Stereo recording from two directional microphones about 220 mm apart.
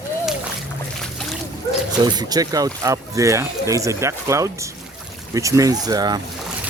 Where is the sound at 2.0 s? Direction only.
15° right (ahead or behind).